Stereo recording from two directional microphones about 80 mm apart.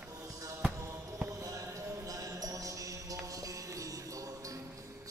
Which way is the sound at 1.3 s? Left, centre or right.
Right.